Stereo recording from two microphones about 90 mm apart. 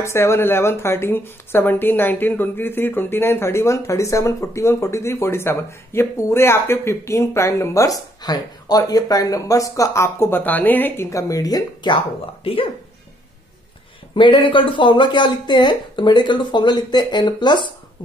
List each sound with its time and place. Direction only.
0.0 s speech: 30° left (ahead or behind)
11.1 s speech: 40° left (ahead or behind)
12.4 s speech: 85° left
14.1 s speech: 65° left (ahead or behind)